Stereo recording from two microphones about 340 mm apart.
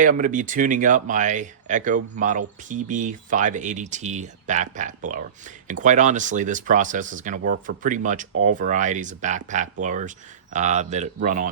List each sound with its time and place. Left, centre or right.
0.0 s speech: right